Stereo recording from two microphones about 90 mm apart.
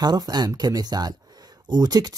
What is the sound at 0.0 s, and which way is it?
Speech, 50° right (ahead or behind).